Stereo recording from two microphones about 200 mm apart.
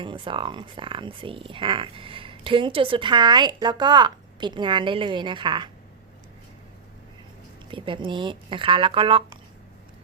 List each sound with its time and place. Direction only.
0.0 s speech: 25° right (ahead or behind)
7.7 s speech: 25° right (ahead or behind)